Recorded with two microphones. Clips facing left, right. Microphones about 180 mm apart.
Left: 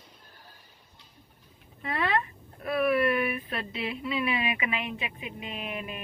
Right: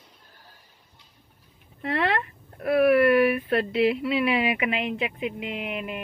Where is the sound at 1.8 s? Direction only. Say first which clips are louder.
Right 3 dB; 75° right (ahead or behind).